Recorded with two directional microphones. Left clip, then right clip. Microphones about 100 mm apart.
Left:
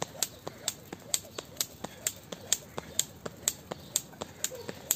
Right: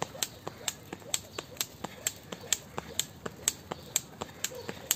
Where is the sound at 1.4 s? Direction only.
50° left (ahead or behind).